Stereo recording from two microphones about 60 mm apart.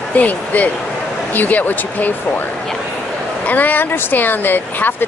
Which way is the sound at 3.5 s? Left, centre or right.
Left.